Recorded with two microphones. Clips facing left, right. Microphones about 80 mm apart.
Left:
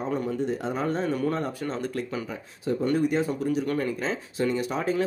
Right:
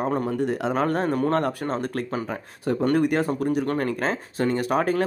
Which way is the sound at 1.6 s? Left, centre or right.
Right.